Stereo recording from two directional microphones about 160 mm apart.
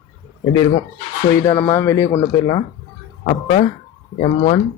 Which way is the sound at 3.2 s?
50° left (ahead or behind).